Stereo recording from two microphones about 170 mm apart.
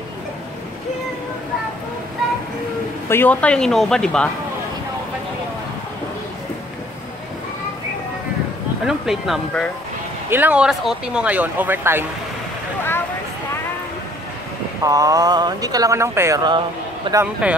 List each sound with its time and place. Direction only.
3.1 s speech: 10° left (ahead or behind)
8.8 s speech: centre (ahead or behind)
10.3 s speech: 10° right (ahead or behind)
14.8 s speech: 20° right (ahead or behind)
17.2 s speech: 5° right (ahead or behind)